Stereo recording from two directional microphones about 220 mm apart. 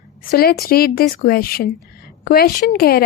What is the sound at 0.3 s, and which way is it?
A woman's voice, 40° left (ahead or behind).